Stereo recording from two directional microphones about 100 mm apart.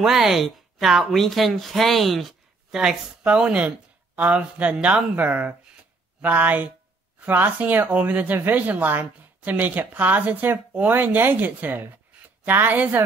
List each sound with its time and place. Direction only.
0.0 s a woman's voice: 5° right (ahead or behind)